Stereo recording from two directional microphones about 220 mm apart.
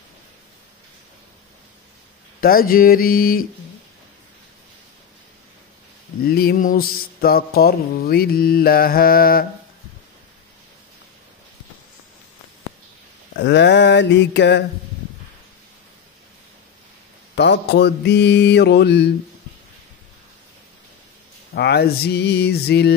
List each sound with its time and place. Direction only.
2.4 s a sound: 40° left (ahead or behind)
6.2 s mantra: 45° left (ahead or behind)
13.4 s mantra: 50° left (ahead or behind)
17.4 s mantra: 50° left (ahead or behind)
21.5 s mantra: 50° left (ahead or behind)